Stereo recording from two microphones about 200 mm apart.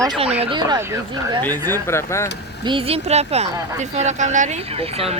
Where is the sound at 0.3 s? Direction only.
20° right (ahead or behind).